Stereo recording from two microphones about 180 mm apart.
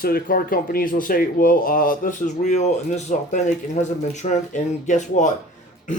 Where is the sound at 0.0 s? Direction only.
55° left (ahead or behind).